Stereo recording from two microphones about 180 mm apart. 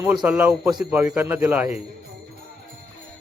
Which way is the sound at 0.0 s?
5° right (ahead or behind).